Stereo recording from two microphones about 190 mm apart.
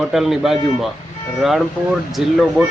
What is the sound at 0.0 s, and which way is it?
Speech, centre (ahead or behind).